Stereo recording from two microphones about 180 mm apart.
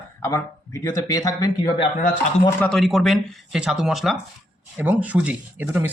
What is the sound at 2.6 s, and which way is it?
Speech, centre (ahead or behind).